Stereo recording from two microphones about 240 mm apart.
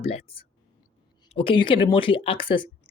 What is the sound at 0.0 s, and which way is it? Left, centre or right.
Speech, left.